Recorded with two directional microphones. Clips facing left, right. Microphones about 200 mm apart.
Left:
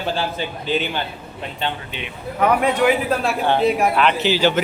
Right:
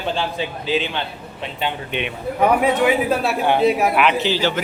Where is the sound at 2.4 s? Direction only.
5° right (ahead or behind).